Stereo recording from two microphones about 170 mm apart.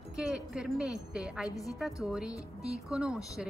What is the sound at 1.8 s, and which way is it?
Speech, 5° right (ahead or behind).